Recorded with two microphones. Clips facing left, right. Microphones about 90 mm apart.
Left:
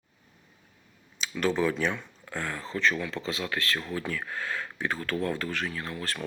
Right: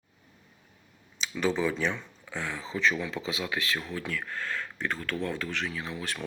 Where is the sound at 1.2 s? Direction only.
Centre (ahead or behind).